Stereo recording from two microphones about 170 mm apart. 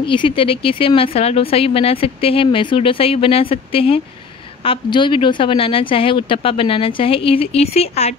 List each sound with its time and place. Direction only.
0.0 s speech: 30° left (ahead or behind)